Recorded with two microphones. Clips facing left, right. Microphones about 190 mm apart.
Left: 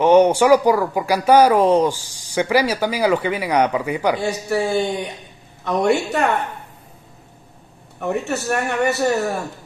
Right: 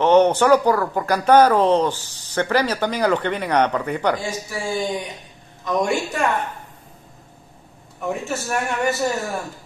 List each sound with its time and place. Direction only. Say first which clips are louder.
0.0 s speech: left 2 dB; 10° left (ahead or behind)
4.2 s speech: left 7 dB; 65° left (ahead or behind)
8.1 s speech: left 3 dB; 65° left (ahead or behind)